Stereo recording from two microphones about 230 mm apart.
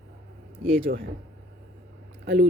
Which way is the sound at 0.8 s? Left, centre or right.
Right.